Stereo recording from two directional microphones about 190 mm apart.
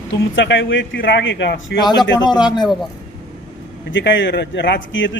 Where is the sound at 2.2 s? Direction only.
25° left (ahead or behind).